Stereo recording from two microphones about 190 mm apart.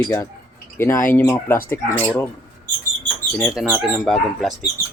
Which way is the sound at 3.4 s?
Centre (ahead or behind).